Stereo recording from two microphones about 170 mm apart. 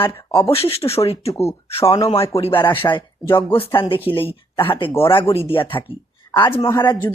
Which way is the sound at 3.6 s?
30° left (ahead or behind).